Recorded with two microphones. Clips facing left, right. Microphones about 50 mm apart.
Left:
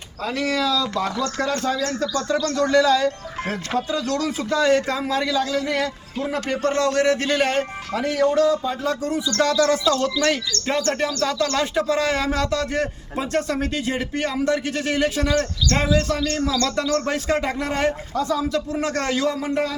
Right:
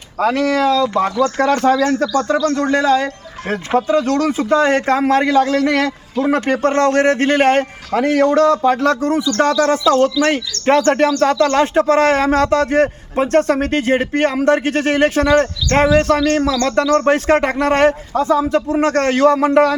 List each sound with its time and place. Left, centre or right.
0.2 s speech: right
0.4 s speech: right
1.8 s speech: right
6.6 s speech: right
10.7 s speech: right
18.2 s speech: right